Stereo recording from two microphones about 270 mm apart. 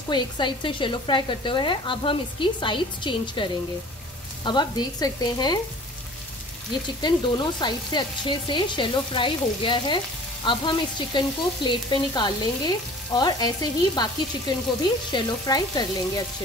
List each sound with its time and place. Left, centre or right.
0.1 s sizzle: centre
4.5 s sizzle: centre
7.0 s sizzle: centre